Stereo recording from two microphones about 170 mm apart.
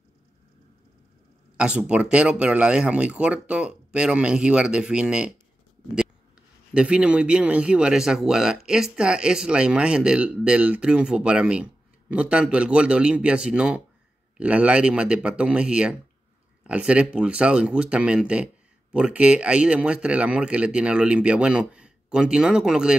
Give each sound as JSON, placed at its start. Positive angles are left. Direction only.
{"t": 1.6, "sound": "speech", "side_deg": -5}
{"t": 6.7, "sound": "speech", "side_deg": -5}